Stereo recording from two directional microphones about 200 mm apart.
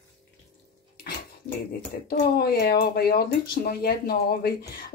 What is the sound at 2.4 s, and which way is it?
Speech, 50° left (ahead or behind).